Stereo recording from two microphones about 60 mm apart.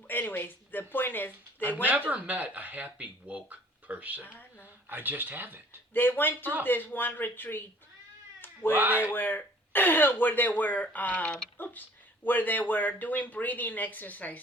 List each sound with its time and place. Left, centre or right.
0.1 s speech: left
1.9 s speech: right
4.2 s speech: left
4.6 s speech: right
5.9 s speech: left
8.7 s speech: right
9.0 s speech: left